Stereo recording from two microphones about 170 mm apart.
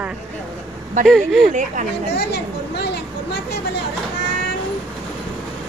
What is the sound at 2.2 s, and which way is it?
Speech, 80° left.